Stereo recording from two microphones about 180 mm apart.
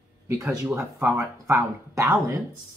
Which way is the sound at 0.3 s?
20° right (ahead or behind).